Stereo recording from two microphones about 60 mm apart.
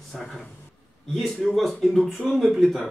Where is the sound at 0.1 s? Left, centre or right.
Centre.